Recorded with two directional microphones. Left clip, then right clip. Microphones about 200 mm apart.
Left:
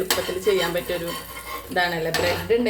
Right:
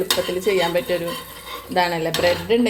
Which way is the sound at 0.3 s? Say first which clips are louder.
Right 2 dB; 35° right (ahead or behind).